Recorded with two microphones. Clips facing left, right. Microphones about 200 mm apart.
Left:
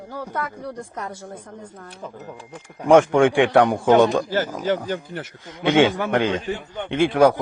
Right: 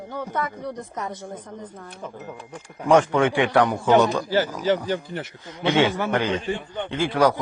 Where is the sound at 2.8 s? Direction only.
15° left (ahead or behind).